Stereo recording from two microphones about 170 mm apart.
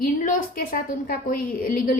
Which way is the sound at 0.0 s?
50° left (ahead or behind).